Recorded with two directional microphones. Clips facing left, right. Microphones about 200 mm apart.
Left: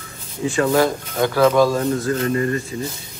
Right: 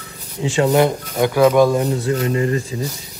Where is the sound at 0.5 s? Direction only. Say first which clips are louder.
Right 2 dB; 20° right (ahead or behind).